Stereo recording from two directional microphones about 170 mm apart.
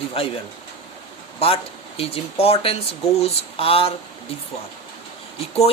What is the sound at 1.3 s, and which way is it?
Speech, 35° left (ahead or behind).